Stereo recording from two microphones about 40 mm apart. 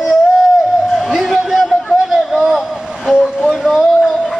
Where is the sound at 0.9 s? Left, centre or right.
Centre.